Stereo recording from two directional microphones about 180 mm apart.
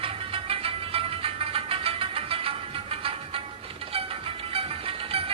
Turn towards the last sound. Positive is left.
turn(degrees=-30)  # may be behind; listen again after turning